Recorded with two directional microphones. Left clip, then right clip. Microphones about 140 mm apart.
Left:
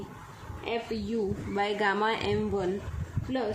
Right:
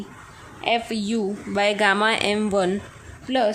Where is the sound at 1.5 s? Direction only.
35° right (ahead or behind).